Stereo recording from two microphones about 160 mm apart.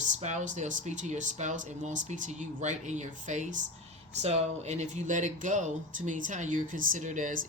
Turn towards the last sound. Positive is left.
turn(degrees=-50)  # may be behind; listen again after turning